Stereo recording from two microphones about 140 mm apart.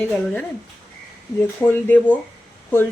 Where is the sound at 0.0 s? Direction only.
10° left (ahead or behind).